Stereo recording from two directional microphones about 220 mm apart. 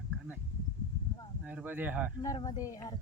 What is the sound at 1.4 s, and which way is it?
Speech, 10° right (ahead or behind).